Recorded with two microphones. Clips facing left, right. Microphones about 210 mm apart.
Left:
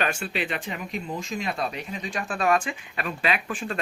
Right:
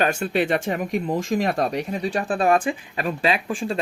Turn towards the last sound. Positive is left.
turn(degrees=-30)  # may be behind; listen again after turning